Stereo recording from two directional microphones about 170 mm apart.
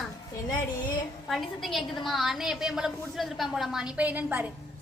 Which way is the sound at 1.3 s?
Centre (ahead or behind).